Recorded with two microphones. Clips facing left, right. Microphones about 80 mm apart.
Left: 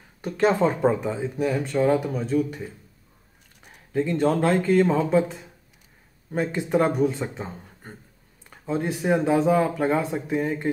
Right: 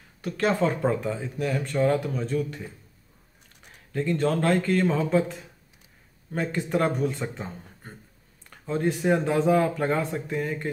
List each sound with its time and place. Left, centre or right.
0.2 s speech: left
3.9 s speech: centre
7.2 s speech: centre